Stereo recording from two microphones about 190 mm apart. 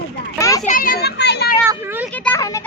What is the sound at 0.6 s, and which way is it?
Children playing, 45° left (ahead or behind).